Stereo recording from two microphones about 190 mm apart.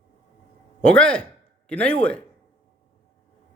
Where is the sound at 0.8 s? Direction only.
5° left (ahead or behind).